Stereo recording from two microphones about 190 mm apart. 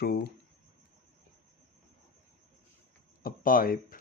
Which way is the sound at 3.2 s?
50° left (ahead or behind).